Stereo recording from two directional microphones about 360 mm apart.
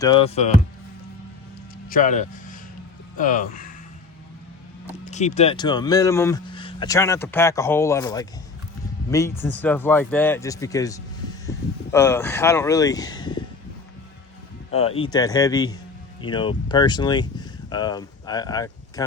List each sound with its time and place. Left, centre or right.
0.0 s a man's voice: centre
1.9 s speech: left
5.1 s a man's voice: centre
14.7 s a man's voice: centre